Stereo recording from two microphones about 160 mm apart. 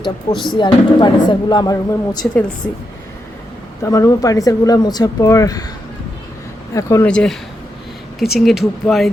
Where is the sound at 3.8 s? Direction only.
20° left (ahead or behind).